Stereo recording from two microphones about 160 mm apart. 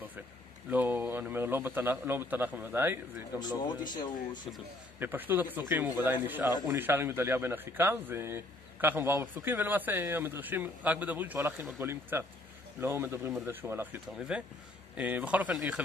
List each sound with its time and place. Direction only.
0.7 s speech: 10° right (ahead or behind)
3.3 s speech: 25° left (ahead or behind)
4.9 s speech: 10° right (ahead or behind)